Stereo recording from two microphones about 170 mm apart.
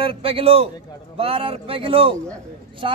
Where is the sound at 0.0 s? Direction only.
35° right (ahead or behind).